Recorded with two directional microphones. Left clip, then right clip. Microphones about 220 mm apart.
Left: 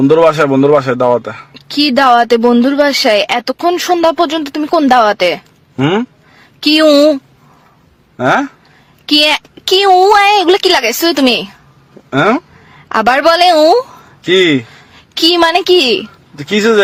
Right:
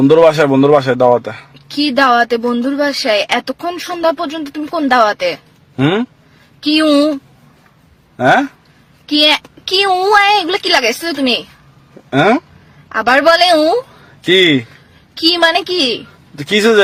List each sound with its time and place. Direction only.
0.0 s a man's voice: centre (ahead or behind)
1.5 s speech: 40° left (ahead or behind)
5.7 s speech: 5° left (ahead or behind)
6.6 s a woman's voice: 45° left (ahead or behind)
8.1 s speech: 5° left (ahead or behind)
9.0 s a woman's voice: 45° left (ahead or behind)
12.1 s a man's voice: 5° left (ahead or behind)
12.9 s a woman's voice: 45° left (ahead or behind)
14.2 s a man's voice: centre (ahead or behind)
15.1 s a woman's voice: 45° left (ahead or behind)
16.3 s a man's voice: centre (ahead or behind)